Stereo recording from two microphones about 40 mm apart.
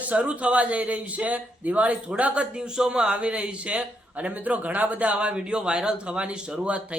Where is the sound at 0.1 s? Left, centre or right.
Right.